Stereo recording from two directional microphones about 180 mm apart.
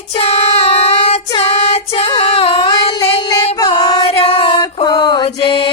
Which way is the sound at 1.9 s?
35° left (ahead or behind).